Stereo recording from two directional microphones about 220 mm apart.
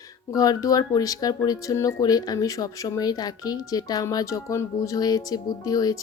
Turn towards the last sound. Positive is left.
turn(degrees=15)  # may be behind; listen again after turning